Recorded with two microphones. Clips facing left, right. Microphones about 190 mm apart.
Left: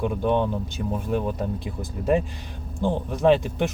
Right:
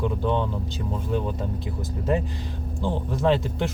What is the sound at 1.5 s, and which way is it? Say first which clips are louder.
Speech: even; 20° right (ahead or behind).